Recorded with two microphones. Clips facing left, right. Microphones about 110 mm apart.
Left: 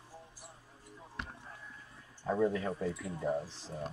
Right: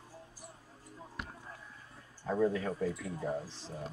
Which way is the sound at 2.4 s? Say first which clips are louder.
Right 1 dB; 5° left (ahead or behind).